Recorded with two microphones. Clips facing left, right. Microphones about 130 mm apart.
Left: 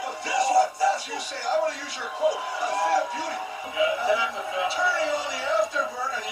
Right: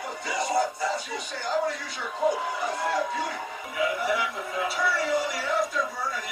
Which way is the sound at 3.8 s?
25° left (ahead or behind).